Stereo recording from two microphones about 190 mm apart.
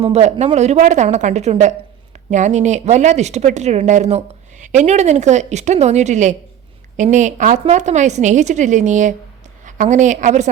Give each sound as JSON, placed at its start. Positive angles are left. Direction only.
{"t": 0.0, "sound": "a woman's voice", "side_deg": -35}